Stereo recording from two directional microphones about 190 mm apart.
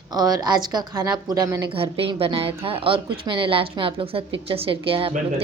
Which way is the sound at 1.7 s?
30° right (ahead or behind).